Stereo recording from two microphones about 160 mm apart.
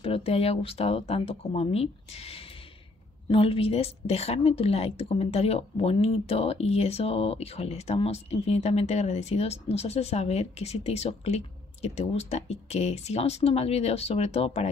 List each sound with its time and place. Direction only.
0.0 s a woman's voice: 40° left (ahead or behind)